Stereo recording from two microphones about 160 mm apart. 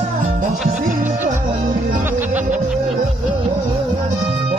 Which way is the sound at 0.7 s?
55° right (ahead or behind).